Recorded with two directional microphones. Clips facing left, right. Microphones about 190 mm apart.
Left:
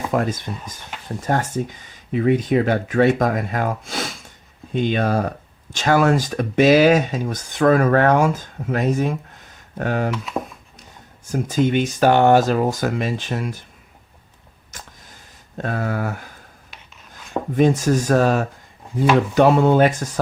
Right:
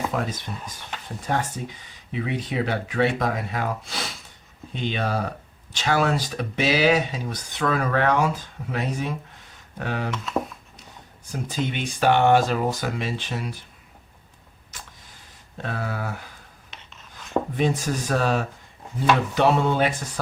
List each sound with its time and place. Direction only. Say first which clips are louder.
0.1 s speech: left 6 dB; 45° left (ahead or behind)
11.3 s speech: left 9 dB; 45° left (ahead or behind)
15.5 s speech: left 6 dB; 50° left (ahead or behind)
16.7 s writing: right 1 dB; centre (ahead or behind)
17.6 s speech: left 12 dB; 45° left (ahead or behind)